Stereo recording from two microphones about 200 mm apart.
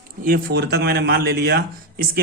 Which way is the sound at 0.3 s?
55° right (ahead or behind).